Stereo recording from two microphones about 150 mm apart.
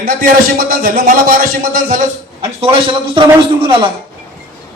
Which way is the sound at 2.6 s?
35° right (ahead or behind).